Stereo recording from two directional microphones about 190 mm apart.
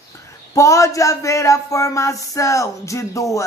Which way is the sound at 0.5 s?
15° left (ahead or behind).